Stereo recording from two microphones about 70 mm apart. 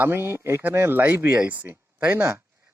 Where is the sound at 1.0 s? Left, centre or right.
Right.